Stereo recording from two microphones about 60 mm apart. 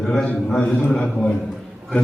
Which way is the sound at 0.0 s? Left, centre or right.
Centre.